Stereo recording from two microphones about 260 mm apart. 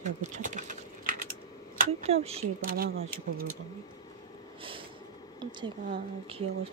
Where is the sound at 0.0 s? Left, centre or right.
Right.